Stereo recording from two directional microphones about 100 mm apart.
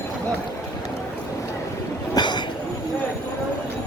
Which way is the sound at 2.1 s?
50° left (ahead or behind).